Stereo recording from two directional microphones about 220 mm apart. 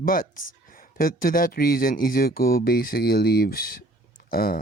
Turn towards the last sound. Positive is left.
turn(degrees=40)  # may be behind; listen again after turning